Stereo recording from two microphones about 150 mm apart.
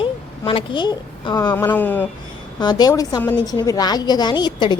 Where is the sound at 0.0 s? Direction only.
35° left (ahead or behind).